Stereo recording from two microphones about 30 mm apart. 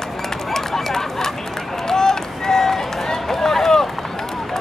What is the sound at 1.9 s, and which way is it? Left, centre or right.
Run, centre.